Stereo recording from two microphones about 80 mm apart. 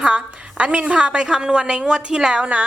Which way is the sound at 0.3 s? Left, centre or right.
Centre.